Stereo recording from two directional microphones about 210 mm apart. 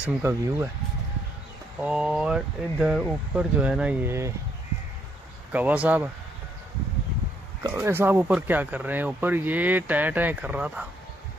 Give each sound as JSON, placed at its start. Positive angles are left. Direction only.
{"t": 0.0, "sound": "speech", "side_deg": -10}
{"t": 1.8, "sound": "speech", "side_deg": -5}
{"t": 5.5, "sound": "speech", "side_deg": -5}
{"t": 7.6, "sound": "speech", "side_deg": -10}